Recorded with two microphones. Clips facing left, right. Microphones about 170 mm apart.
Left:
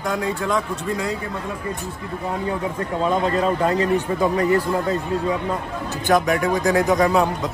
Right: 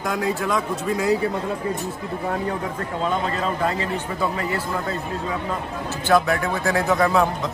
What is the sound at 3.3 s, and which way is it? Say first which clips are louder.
Speech: left 4 dB; 40° left (ahead or behind).